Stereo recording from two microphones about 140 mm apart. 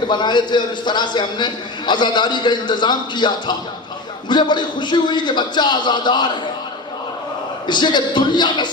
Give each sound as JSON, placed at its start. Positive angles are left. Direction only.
{"t": 0.1, "sound": "a man's voice", "side_deg": 30}
{"t": 7.7, "sound": "a man's voice", "side_deg": 35}